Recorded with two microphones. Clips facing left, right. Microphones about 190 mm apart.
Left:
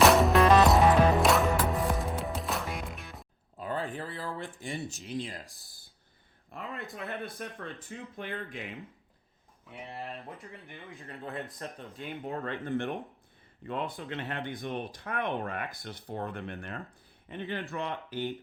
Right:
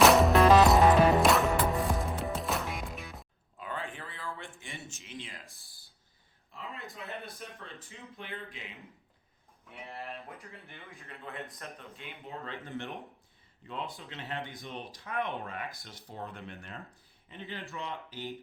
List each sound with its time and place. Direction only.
0.0 s music: centre (ahead or behind)
3.6 s a sound: 35° left (ahead or behind)
6.5 s speech: 55° left (ahead or behind)
10.4 s speech: 15° left (ahead or behind)
11.0 s speech: 35° left (ahead or behind)
12.0 s speech: 50° left (ahead or behind)